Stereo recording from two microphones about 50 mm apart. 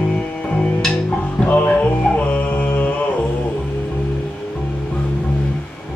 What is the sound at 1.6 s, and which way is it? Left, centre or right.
Music, left.